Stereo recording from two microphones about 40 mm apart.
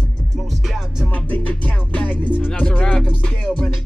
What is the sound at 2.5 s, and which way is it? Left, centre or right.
Speech, centre.